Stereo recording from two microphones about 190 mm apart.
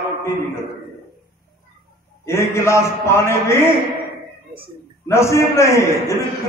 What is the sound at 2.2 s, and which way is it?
A man's voice, 15° left (ahead or behind).